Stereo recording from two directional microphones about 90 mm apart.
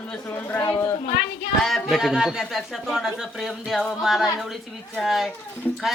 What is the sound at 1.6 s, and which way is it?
Speech, centre (ahead or behind).